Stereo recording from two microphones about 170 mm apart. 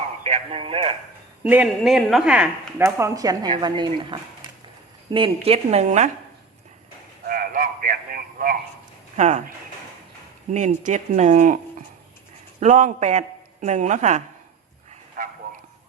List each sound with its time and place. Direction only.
0.3 s a woman's voice: 35° right (ahead or behind)
1.5 s speech: 5° right (ahead or behind)
2.8 s a woman's voice: 20° right (ahead or behind); by 6.1 s 40° right (ahead or behind)
7.3 s a sound: 55° right (ahead or behind)
9.1 s speech: 45° right (ahead or behind)
10.5 s speech: 45° right (ahead or behind)